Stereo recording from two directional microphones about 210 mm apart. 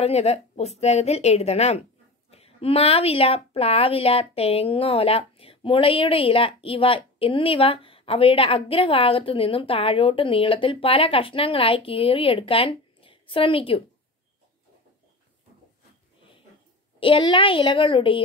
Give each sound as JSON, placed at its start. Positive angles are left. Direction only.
{"t": 0.0, "sound": "a woman's voice", "side_deg": 30}
{"t": 17.0, "sound": "a woman's voice", "side_deg": 25}